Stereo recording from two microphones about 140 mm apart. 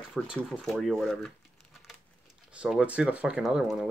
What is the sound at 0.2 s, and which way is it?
Speech, centre (ahead or behind).